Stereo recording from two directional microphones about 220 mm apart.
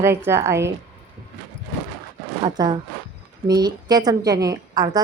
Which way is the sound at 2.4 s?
20° right (ahead or behind).